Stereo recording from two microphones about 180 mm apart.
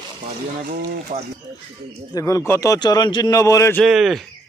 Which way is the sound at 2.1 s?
20° left (ahead or behind).